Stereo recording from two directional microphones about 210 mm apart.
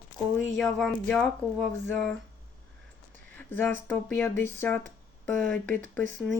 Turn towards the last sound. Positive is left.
turn(degrees=5)  # may be behind; listen again after turning